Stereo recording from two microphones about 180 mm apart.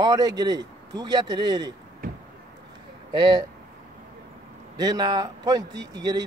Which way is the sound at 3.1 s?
25° right (ahead or behind).